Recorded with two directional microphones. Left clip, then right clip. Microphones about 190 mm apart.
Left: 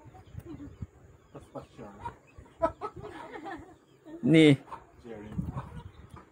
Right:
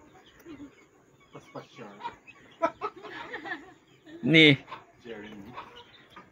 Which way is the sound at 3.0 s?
55° left (ahead or behind).